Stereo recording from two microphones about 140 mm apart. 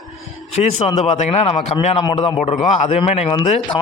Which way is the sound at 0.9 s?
55° left (ahead or behind).